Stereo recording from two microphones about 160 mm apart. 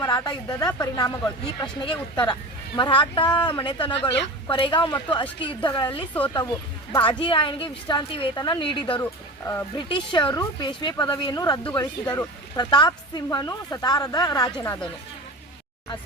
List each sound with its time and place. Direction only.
0.0 s a woman's voice: 25° left (ahead or behind)